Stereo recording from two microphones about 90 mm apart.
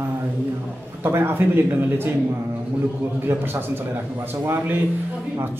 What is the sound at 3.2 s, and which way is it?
Speech, 25° right (ahead or behind).